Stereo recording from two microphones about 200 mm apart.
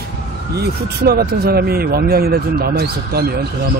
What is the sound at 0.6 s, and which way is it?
Speech, 50° right (ahead or behind).